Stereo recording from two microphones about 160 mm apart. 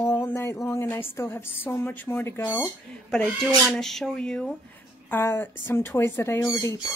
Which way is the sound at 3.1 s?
5° left (ahead or behind).